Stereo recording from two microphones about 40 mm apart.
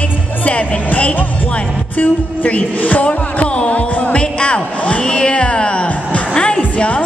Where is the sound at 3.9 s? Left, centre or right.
Left.